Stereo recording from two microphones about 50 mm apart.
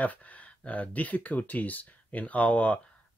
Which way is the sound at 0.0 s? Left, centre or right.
Left.